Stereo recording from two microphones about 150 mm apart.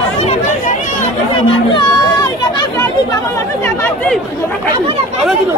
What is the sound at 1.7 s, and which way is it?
Speech, 30° left (ahead or behind).